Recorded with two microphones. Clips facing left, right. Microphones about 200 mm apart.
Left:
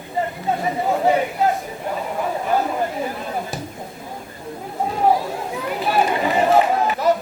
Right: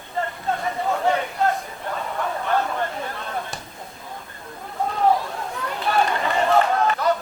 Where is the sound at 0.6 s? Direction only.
15° left (ahead or behind).